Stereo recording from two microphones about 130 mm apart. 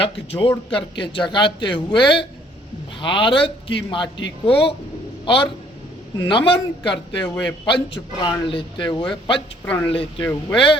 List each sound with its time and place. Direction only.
0.0 s a man's voice: 45° left (ahead or behind)